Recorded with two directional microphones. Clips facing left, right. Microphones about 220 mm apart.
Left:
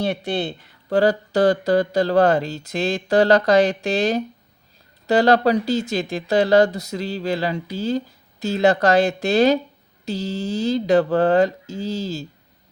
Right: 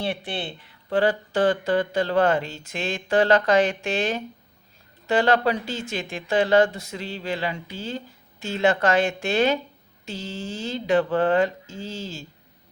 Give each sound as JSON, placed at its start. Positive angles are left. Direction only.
{"t": 0.0, "sound": "speech", "side_deg": 40}